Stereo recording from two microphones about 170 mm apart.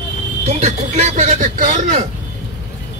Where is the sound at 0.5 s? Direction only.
40° right (ahead or behind).